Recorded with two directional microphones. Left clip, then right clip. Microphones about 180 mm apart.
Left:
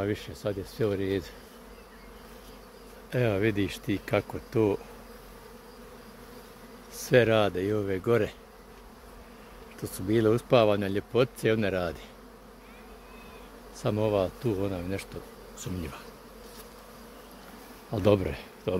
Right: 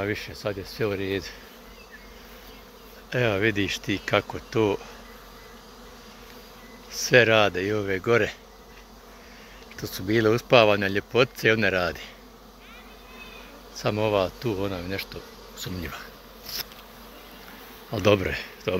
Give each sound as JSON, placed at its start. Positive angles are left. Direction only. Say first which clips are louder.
{"t": 0.0, "sound": "bee", "louder": "right 3 dB", "side_deg": 15}
{"t": 3.1, "sound": "a man's voice", "louder": "right 4 dB", "side_deg": 5}
{"t": 6.9, "sound": "bee", "louder": "right 4 dB", "side_deg": 10}
{"t": 9.8, "sound": "a man's voice", "louder": "right 3 dB", "side_deg": 0}
{"t": 13.7, "sound": "a man's voice", "louder": "right 3 dB", "side_deg": 5}
{"t": 17.9, "sound": "bee", "louder": "right 3 dB", "side_deg": 10}